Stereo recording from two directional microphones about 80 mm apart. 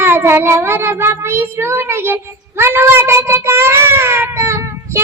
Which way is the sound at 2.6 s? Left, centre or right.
Right.